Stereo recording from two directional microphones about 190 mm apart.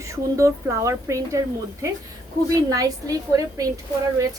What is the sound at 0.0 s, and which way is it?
Speech, 15° right (ahead or behind).